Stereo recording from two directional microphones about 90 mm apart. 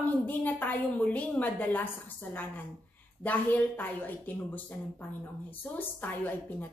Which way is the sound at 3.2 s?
20° left (ahead or behind).